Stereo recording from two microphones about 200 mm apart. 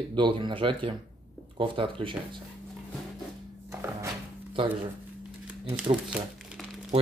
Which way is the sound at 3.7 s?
15° right (ahead or behind).